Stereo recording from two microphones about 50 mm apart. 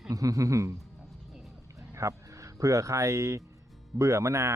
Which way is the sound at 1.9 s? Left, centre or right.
Right.